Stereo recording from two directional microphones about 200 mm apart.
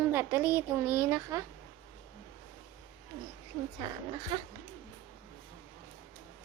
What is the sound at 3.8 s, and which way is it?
Speech, 20° right (ahead or behind).